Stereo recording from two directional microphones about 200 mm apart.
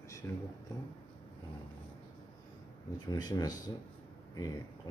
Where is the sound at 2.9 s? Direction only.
20° left (ahead or behind).